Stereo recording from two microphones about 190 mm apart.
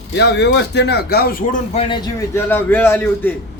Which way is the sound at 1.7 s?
25° left (ahead or behind).